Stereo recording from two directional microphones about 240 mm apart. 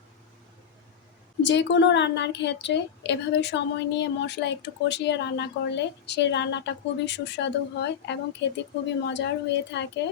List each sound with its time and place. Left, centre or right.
1.4 s a woman's voice: left